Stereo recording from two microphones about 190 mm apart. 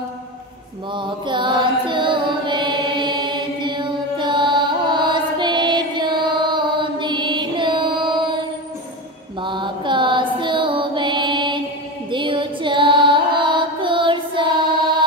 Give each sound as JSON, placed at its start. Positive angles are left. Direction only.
{"t": 0.9, "sound": "carnatic music", "side_deg": -25}
{"t": 9.4, "sound": "music", "side_deg": -25}